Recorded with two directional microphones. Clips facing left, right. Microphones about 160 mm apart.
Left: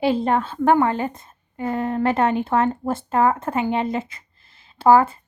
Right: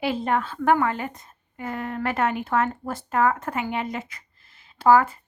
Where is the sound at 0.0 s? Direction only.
30° left (ahead or behind).